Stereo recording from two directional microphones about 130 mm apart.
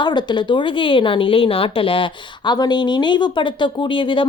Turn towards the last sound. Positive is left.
turn(degrees=40)  # may be behind; listen again after turning